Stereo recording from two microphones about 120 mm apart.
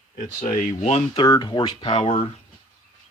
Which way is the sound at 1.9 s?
55° left (ahead or behind).